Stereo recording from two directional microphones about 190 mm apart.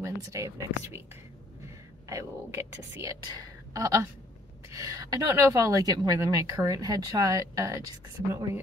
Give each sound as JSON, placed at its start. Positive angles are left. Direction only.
{"t": 0.0, "sound": "a woman's voice", "side_deg": -15}
{"t": 2.0, "sound": "a woman's voice", "side_deg": -15}